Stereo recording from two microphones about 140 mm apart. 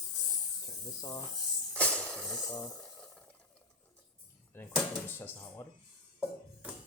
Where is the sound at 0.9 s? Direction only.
30° left (ahead or behind).